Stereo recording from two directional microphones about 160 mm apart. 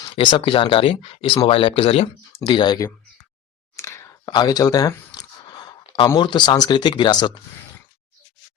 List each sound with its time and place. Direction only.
0.2 s speech: 30° left (ahead or behind)
3.8 s a sound: 20° left (ahead or behind)
6.1 s speech: 30° left (ahead or behind)